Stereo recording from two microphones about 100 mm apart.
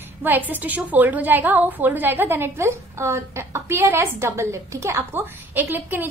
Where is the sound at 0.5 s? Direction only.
15° right (ahead or behind).